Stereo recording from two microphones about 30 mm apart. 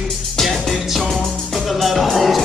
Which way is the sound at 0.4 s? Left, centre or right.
Centre.